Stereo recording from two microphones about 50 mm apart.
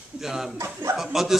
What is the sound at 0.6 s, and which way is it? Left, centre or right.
Speech, right.